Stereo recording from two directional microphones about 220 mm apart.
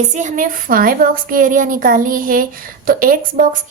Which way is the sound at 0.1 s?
35° right (ahead or behind).